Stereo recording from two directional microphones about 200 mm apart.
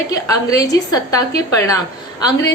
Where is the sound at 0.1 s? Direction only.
20° left (ahead or behind).